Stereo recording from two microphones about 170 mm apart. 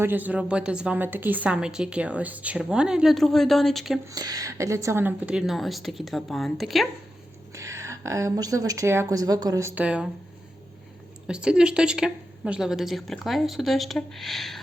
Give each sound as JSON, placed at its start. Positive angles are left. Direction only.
{"t": 0.0, "sound": "a woman's voice", "side_deg": -10}
{"t": 4.1, "sound": "a woman's voice", "side_deg": -20}
{"t": 7.5, "sound": "a woman's voice", "side_deg": -15}
{"t": 11.3, "sound": "a woman's voice", "side_deg": -5}